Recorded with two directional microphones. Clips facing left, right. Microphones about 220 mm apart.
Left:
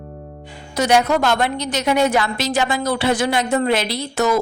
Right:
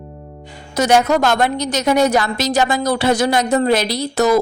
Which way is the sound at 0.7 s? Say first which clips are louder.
Right 2 dB; 45° right (ahead or behind).